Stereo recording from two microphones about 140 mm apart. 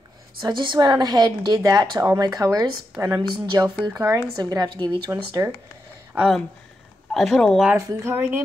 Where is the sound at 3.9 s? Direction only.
25° right (ahead or behind).